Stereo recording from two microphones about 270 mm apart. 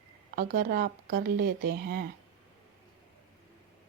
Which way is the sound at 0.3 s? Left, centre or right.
Right.